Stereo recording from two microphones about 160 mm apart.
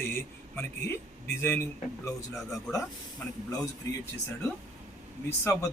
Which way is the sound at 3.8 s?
20° left (ahead or behind).